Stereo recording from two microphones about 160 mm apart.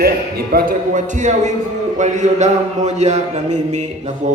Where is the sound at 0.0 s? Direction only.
70° right (ahead or behind).